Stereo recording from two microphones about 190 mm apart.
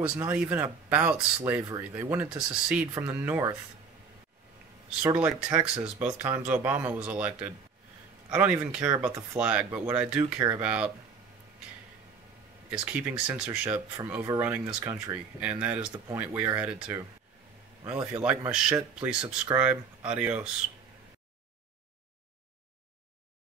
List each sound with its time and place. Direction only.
0.0 s speech: 5° right (ahead or behind)
5.0 s speech: 5° right (ahead or behind)
12.6 s speech: 5° right (ahead or behind)
14.8 s speech: 20° right (ahead or behind)
15.4 s speech: 10° right (ahead or behind)